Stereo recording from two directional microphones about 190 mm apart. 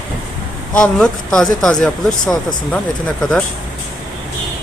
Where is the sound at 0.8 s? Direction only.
5° left (ahead or behind).